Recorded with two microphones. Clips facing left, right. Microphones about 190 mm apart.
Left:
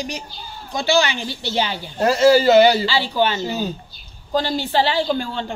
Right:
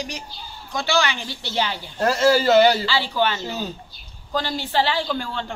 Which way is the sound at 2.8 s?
20° left (ahead or behind).